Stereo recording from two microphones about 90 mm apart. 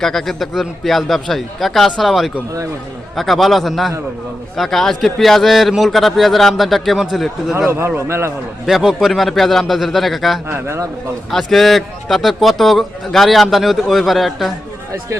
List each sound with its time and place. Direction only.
0.0 s a man's voice: 5° left (ahead or behind)
7.7 s a man's voice: 25° right (ahead or behind)
8.6 s a man's voice: 5° right (ahead or behind)
10.5 s a man's voice: 30° right (ahead or behind)
11.3 s a man's voice: 5° left (ahead or behind)